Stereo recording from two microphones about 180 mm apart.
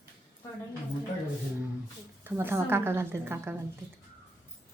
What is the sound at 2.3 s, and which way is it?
A woman's voice, 15° right (ahead or behind).